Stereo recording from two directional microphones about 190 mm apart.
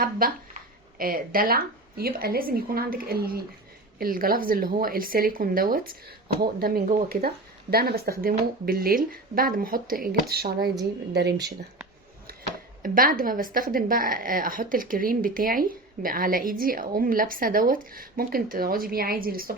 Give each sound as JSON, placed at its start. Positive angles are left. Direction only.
{"t": 0.2, "sound": "a woman's voice", "side_deg": -50}
{"t": 12.8, "sound": "a woman's voice", "side_deg": -45}